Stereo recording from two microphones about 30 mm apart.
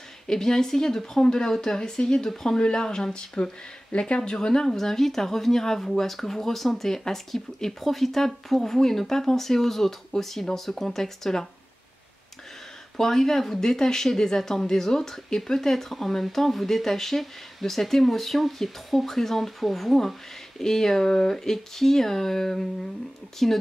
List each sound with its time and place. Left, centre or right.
0.3 s speech: centre
4.1 s speech: left
4.4 s speech: centre
12.9 s speech: centre
20.5 s speech: centre